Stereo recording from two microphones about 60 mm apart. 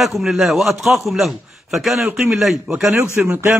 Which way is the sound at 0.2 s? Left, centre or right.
Centre.